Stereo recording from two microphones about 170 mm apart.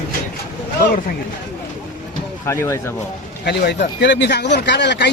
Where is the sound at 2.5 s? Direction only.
15° left (ahead or behind).